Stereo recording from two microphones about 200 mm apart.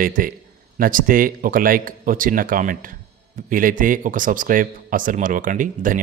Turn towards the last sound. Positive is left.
turn(degrees=-40)  # may be behind; listen again after turning